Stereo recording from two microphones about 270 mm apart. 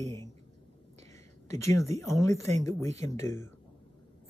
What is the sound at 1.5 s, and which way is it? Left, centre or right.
Speech, centre.